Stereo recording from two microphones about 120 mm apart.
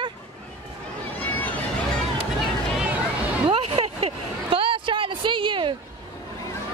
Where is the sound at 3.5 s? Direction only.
60° right (ahead or behind).